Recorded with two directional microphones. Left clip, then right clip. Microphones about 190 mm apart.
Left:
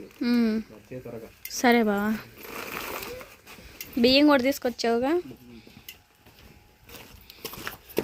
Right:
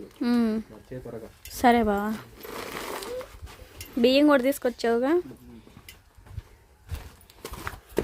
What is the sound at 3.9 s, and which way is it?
Speech, centre (ahead or behind).